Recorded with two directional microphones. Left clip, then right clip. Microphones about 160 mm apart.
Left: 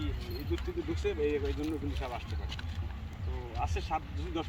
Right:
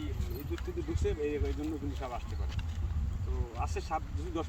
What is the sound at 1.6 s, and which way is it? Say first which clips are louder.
Speech: left 1 dB; 10° right (ahead or behind).